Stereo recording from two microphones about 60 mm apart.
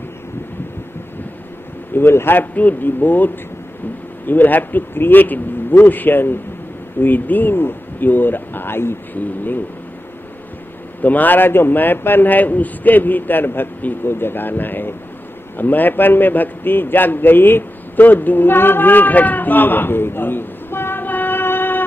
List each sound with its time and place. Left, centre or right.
2.0 s a man's voice: left
2.5 s a man's voice: left
4.3 s a man's voice: left
11.0 s a man's voice: left